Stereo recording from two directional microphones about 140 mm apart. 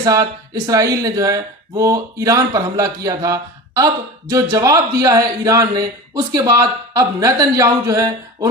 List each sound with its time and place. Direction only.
0.0 s speech: 25° right (ahead or behind)